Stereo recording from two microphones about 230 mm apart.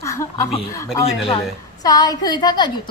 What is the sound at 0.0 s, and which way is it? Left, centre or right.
A woman's voice, centre.